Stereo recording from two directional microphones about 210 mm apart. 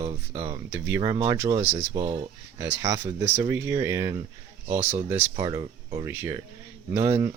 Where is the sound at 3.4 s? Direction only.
10° right (ahead or behind).